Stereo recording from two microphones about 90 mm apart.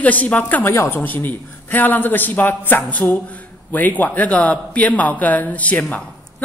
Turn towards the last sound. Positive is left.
turn(degrees=15)  # may be behind; listen again after turning